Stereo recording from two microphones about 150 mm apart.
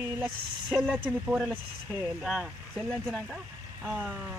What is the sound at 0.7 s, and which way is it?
Speech, 5° right (ahead or behind).